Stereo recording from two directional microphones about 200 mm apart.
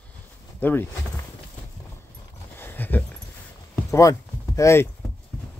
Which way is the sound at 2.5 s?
10° left (ahead or behind).